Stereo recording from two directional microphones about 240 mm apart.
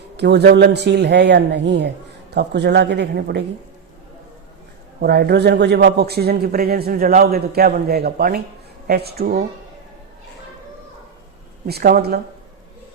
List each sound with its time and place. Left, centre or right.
0.2 s a man's voice: right
4.9 s a man's voice: right
11.6 s a man's voice: right